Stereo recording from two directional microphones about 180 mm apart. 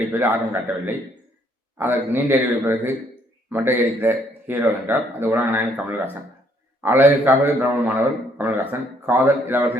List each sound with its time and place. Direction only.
0.1 s a man's voice: 10° right (ahead or behind)